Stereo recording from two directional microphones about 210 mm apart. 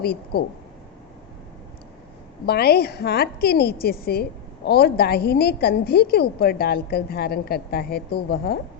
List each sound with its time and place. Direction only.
0.0 s a woman's voice: 50° left (ahead or behind)
2.5 s a woman's voice: 50° left (ahead or behind)